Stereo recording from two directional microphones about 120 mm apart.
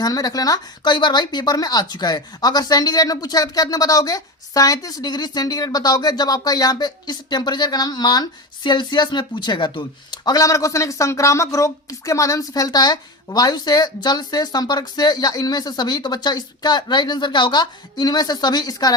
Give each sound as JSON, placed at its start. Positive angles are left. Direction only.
{"t": 0.0, "sound": "speech", "side_deg": 30}